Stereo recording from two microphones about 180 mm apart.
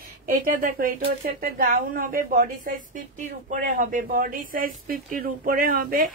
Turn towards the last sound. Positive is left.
turn(degrees=-55)  # may be behind; listen again after turning